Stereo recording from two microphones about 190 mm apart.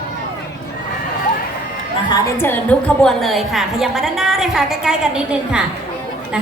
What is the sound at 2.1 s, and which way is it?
A woman's voice, 10° left (ahead or behind).